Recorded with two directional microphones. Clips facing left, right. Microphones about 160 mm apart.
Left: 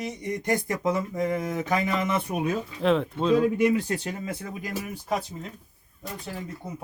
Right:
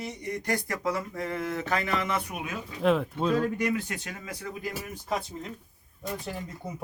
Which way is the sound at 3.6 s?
30° left (ahead or behind).